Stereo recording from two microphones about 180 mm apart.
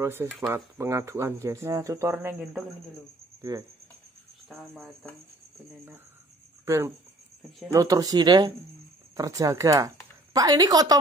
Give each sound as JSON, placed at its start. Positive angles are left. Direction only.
{"t": 0.0, "sound": "speech", "side_deg": -10}
{"t": 3.5, "sound": "speech", "side_deg": -20}
{"t": 6.6, "sound": "speech", "side_deg": -15}